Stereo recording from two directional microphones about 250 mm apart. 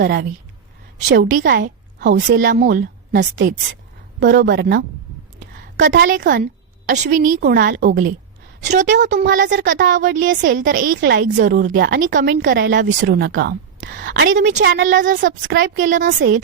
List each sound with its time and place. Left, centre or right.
0.0 s a woman's voice: right
10.6 s speech: right
11.4 s speech: right